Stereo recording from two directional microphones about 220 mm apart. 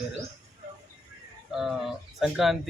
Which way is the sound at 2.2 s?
Centre (ahead or behind).